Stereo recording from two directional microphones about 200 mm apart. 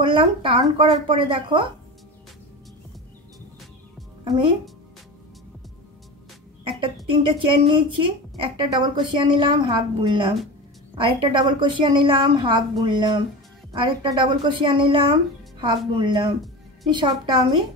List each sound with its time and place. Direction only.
0.0 s a woman's voice: 25° right (ahead or behind)
4.2 s speech: 25° right (ahead or behind)
6.6 s a sound: 25° right (ahead or behind)
7.1 s a woman's voice: 25° right (ahead or behind)